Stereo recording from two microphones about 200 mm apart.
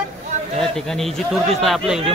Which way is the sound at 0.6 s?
Centre (ahead or behind).